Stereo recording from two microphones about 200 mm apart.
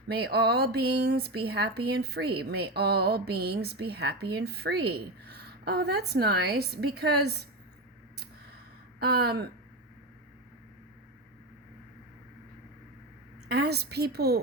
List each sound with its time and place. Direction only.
0.1 s speech: 55° right (ahead or behind)
9.0 s speech: 50° right (ahead or behind)
13.5 s speech: 55° right (ahead or behind)